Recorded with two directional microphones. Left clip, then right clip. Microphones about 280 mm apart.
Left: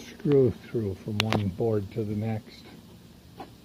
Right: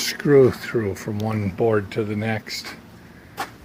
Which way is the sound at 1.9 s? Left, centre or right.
Centre.